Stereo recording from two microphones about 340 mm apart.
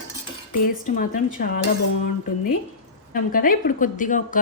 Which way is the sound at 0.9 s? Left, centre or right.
Left.